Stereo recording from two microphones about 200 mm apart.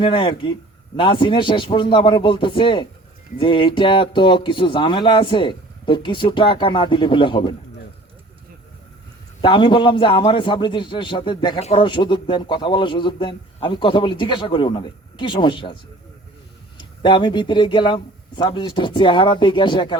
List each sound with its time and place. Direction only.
0.0 s speech: 25° left (ahead or behind)
9.4 s speech: 25° left (ahead or behind)
16.7 s speech: 25° left (ahead or behind)